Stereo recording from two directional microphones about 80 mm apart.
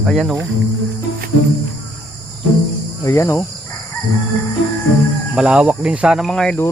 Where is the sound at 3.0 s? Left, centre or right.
Left.